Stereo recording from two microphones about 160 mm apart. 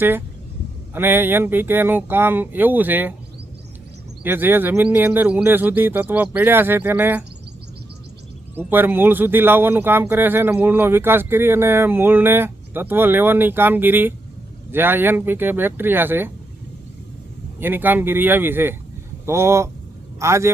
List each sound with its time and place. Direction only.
0.9 s speech: 15° right (ahead or behind)
4.2 s speech: 10° right (ahead or behind)
8.5 s speech: 10° right (ahead or behind)
17.6 s speech: 10° right (ahead or behind)